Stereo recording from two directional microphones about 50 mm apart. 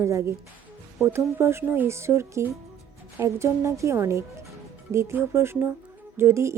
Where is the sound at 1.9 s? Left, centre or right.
Right.